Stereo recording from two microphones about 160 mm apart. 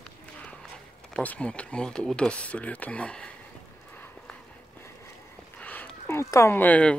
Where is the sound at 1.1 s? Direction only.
10° left (ahead or behind).